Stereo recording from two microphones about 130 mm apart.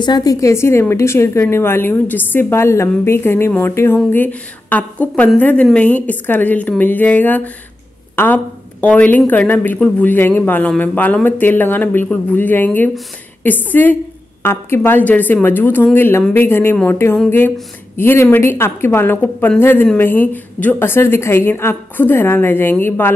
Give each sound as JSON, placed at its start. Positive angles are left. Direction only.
{"t": 0.0, "sound": "a woman's voice", "side_deg": 30}
{"t": 8.8, "sound": "a woman's voice", "side_deg": 10}